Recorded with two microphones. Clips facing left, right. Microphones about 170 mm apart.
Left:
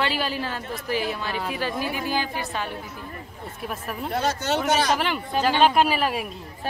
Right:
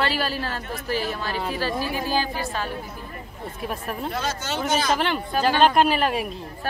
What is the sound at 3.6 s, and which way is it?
Speech, centre (ahead or behind).